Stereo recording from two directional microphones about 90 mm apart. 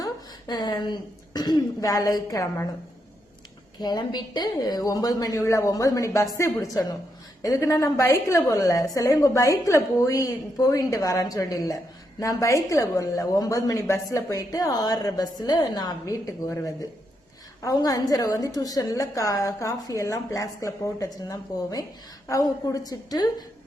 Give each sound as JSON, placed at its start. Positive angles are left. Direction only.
{"t": 0.0, "sound": "a sound", "side_deg": 50}
{"t": 0.8, "sound": "a woman's voice", "side_deg": 50}
{"t": 3.8, "sound": "a woman's voice", "side_deg": 50}
{"t": 17.7, "sound": "a woman's voice", "side_deg": 45}